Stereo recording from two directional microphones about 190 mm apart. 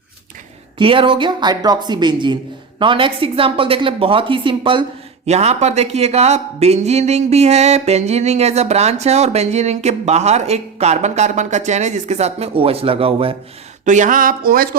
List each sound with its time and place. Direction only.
0.8 s speech: 25° right (ahead or behind)
13.8 s speech: 40° right (ahead or behind)